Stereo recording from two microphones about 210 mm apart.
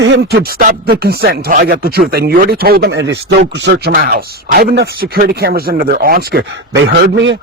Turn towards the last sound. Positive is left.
turn(degrees=-60)  # may be behind; listen again after turning